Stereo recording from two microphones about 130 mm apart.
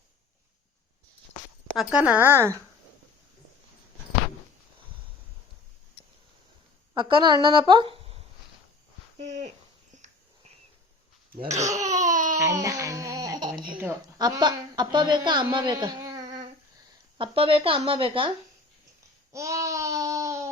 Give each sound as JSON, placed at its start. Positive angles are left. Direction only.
{"t": 1.7, "sound": "a woman's voice", "side_deg": -5}
{"t": 6.9, "sound": "a woman's voice", "side_deg": -35}
{"t": 11.7, "sound": "a sound", "side_deg": -65}
{"t": 12.4, "sound": "baby cry", "side_deg": -25}
{"t": 14.2, "sound": "a woman's voice", "side_deg": -30}
{"t": 17.2, "sound": "speech", "side_deg": -45}
{"t": 19.3, "sound": "babbling", "side_deg": -25}